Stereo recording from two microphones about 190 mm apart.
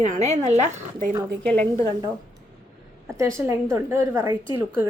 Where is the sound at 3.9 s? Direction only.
15° right (ahead or behind).